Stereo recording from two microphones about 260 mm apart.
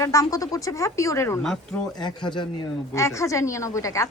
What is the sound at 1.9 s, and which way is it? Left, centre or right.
A woman's voice, centre.